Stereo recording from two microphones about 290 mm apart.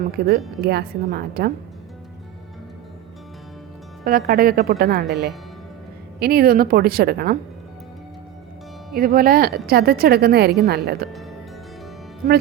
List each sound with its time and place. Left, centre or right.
0.3 s a woman's voice: right
4.0 s a woman's voice: right
6.1 s a woman's voice: right
9.0 s a woman's voice: right
12.2 s music: right